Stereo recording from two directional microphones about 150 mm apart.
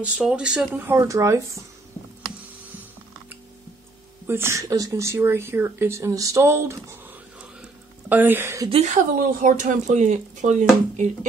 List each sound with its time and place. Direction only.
0.0 s speech: 5° right (ahead or behind)
0.8 s speech: 20° right (ahead or behind)
4.3 s speech: 15° right (ahead or behind)
8.6 s speech: 40° right (ahead or behind)
8.9 s speech: 65° right (ahead or behind)